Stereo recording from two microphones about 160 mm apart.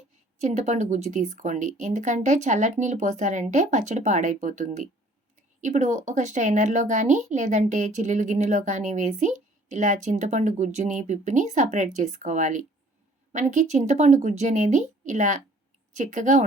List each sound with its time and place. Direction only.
0.3 s speech: 50° right (ahead or behind)